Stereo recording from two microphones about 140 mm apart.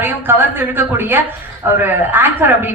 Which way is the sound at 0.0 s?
15° right (ahead or behind).